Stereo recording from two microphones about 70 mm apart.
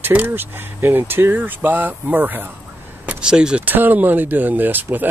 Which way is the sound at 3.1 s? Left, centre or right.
Centre.